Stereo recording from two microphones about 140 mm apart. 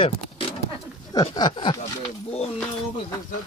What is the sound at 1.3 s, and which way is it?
Speech, 35° left (ahead or behind).